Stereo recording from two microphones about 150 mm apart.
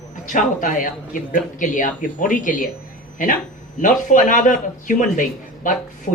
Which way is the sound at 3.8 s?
60° left (ahead or behind).